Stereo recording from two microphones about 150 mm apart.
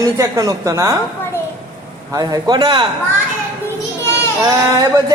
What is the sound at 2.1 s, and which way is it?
Speech, 25° right (ahead or behind).